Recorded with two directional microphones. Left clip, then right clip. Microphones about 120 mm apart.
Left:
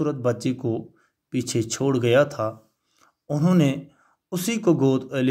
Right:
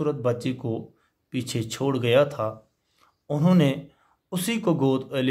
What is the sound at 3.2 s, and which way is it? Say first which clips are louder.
Speech: even; 15° left (ahead or behind).